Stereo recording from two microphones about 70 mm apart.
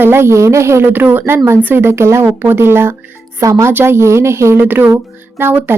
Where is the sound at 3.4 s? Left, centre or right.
Right.